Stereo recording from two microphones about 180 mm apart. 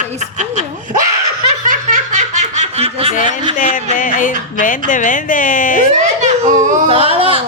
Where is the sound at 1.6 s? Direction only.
45° right (ahead or behind).